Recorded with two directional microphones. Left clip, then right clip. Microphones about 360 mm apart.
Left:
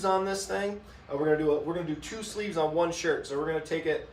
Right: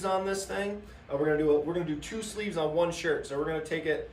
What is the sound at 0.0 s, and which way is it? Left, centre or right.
Speech, centre.